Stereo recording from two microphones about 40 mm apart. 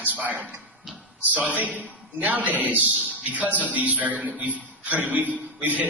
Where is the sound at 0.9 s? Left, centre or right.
Centre.